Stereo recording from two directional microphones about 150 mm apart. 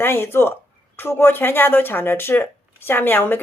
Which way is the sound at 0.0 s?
15° left (ahead or behind).